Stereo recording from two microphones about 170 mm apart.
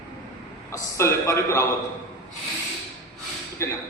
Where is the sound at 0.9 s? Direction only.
15° left (ahead or behind).